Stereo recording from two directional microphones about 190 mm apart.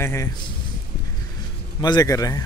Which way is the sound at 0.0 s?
15° left (ahead or behind).